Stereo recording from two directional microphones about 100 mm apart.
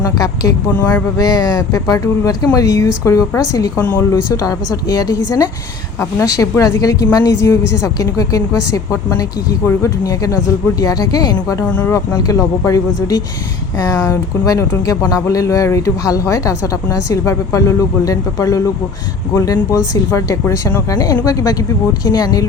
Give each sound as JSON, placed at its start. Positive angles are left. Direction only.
{"t": 0.0, "sound": "speech", "side_deg": 35}
{"t": 0.7, "sound": "speech", "side_deg": 15}
{"t": 1.1, "sound": "speech", "side_deg": 40}
{"t": 3.8, "sound": "speech", "side_deg": 20}
{"t": 4.3, "sound": "speech", "side_deg": 40}
{"t": 11.7, "sound": "speech", "side_deg": 20}
{"t": 11.9, "sound": "speech", "side_deg": 35}